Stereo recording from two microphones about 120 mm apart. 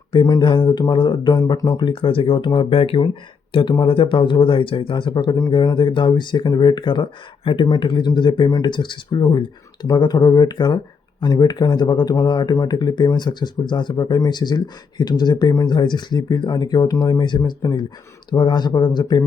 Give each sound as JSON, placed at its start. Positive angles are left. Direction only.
{"t": 0.1, "sound": "speech", "side_deg": 40}